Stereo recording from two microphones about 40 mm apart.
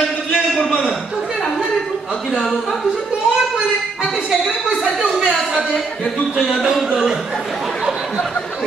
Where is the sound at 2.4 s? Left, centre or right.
Centre.